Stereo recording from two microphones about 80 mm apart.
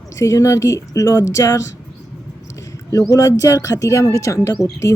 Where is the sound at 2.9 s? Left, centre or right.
Left.